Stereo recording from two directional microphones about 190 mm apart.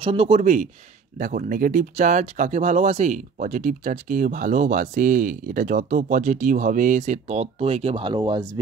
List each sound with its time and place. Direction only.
0.0 s speech: 30° right (ahead or behind)